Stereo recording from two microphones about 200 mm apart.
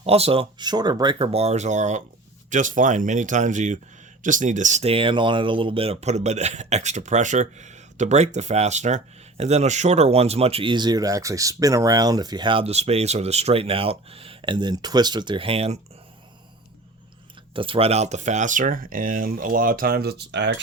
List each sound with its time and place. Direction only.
0.0 s speech: 30° right (ahead or behind)
17.5 s speech: 25° right (ahead or behind); by 20.6 s 60° right (ahead or behind)